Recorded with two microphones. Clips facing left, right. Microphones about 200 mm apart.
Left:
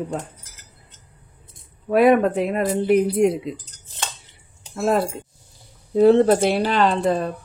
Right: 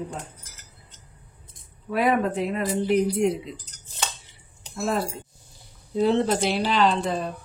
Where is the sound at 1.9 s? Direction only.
65° left (ahead or behind).